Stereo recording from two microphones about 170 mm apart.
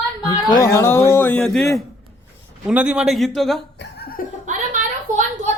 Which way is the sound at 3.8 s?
60° left (ahead or behind).